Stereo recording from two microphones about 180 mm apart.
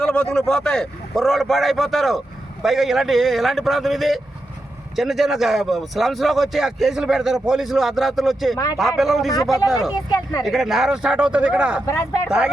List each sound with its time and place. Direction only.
0.0 s a man's voice: 5° left (ahead or behind)
8.5 s speech: 20° left (ahead or behind)
9.0 s a man's voice: centre (ahead or behind)
10.1 s speech: 20° left (ahead or behind)
10.4 s a man's voice: centre (ahead or behind)
11.9 s speech: 15° left (ahead or behind)